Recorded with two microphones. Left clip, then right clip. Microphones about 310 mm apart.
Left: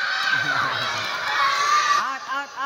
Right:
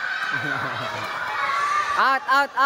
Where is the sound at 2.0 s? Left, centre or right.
Centre.